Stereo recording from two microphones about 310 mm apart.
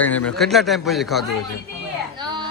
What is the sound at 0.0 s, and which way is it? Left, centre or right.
Speech, centre.